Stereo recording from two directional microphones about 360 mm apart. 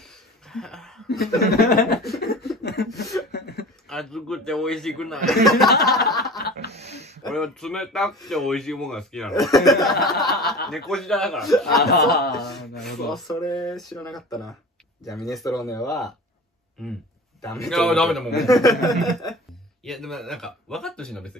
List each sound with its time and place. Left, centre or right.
0.5 s speech: centre
1.4 s speech: left
2.0 s laughter: left
2.6 s beatboxing: left
3.3 s a sound: left
3.9 s speech: centre
6.0 s chuckle: centre
6.5 s a sound: centre
7.2 s speech: centre